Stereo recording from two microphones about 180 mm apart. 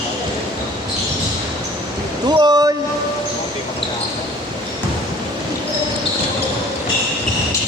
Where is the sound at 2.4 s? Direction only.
20° right (ahead or behind).